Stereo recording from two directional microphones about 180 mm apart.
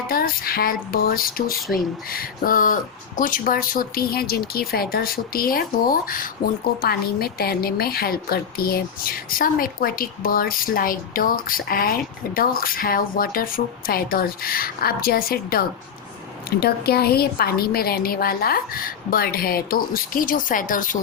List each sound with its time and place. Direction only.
0.1 s a woman's voice: 55° left (ahead or behind)